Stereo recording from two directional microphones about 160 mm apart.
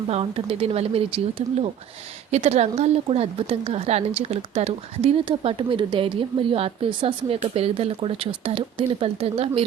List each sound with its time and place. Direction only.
0.1 s speech: 40° right (ahead or behind)